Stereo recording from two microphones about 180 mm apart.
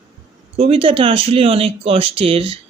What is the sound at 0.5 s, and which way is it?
Speech, 30° right (ahead or behind).